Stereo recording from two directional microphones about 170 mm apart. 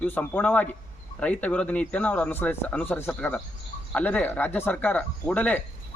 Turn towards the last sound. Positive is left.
turn(degrees=10)  # may be behind; listen again after turning